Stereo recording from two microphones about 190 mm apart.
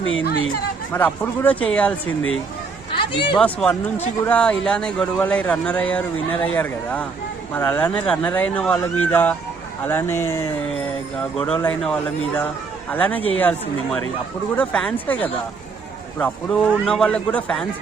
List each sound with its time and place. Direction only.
0.0 s speech: 90° left
0.9 s speech: 10° left (ahead or behind)
3.0 s speech: 25° left (ahead or behind)
3.3 s a man's voice: 5° left (ahead or behind)